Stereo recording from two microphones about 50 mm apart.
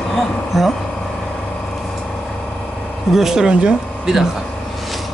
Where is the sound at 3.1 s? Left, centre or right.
Centre.